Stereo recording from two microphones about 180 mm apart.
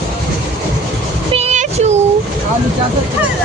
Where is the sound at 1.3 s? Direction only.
40° right (ahead or behind).